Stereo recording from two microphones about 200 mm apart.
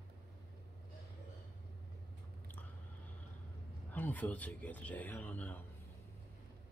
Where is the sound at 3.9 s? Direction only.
10° left (ahead or behind).